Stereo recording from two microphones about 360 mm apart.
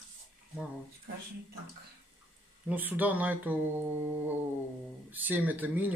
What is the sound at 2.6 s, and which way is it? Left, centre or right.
Speech, centre.